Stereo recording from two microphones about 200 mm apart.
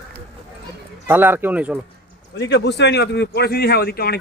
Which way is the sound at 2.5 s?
60° left (ahead or behind).